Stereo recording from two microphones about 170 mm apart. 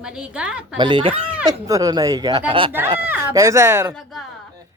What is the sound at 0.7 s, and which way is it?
Speech, 30° right (ahead or behind).